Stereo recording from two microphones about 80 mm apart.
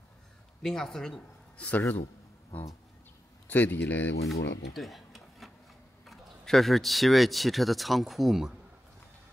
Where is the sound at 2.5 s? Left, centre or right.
Centre.